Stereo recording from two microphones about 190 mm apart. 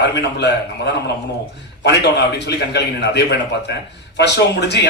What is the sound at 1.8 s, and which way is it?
A man's voice, 60° left (ahead or behind).